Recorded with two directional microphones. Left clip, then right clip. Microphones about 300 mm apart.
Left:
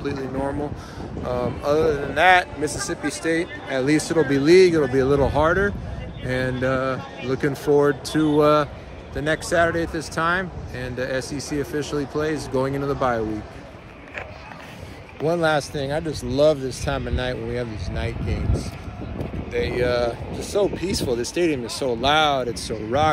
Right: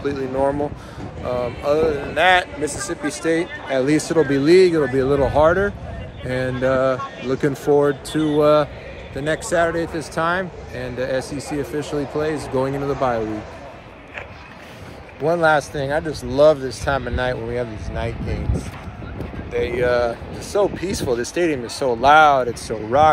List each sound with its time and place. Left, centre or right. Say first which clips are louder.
0.0 s speech: right 6 dB; centre
15.2 s speech: right 4 dB; centre
19.5 s speech: right 3 dB; centre